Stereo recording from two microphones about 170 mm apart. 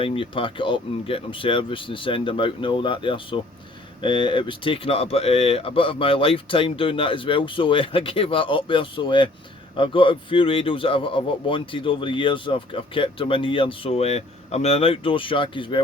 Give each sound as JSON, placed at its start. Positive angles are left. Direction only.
{"t": 0.0, "sound": "a man's voice", "side_deg": 30}